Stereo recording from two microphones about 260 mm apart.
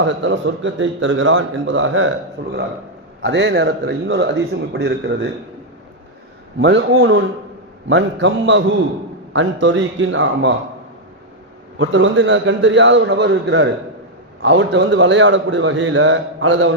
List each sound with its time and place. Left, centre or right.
0.0 s a man's voice: right
6.6 s a man's voice: right
7.9 s a man's voice: right
11.8 s a man's voice: right